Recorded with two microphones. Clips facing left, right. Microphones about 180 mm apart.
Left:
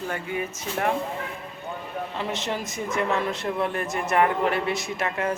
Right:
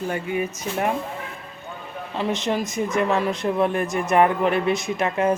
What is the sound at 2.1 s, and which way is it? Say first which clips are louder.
A woman's voice: right 7 dB; 20° right (ahead or behind).